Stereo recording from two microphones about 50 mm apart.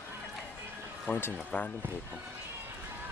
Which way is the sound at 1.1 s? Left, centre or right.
Left.